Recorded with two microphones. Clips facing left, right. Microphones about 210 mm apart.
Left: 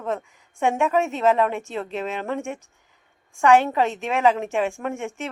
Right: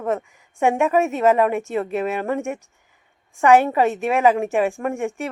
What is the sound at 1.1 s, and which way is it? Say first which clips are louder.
Speech: right 3 dB; 15° right (ahead or behind).